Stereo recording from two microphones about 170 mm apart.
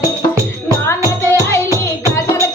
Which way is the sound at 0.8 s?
15° left (ahead or behind).